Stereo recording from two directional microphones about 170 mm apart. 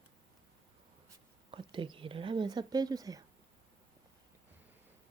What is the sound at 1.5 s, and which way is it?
Speech, 30° right (ahead or behind).